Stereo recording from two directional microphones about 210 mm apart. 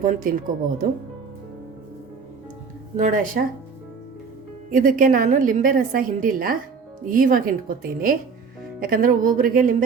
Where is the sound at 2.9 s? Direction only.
40° right (ahead or behind).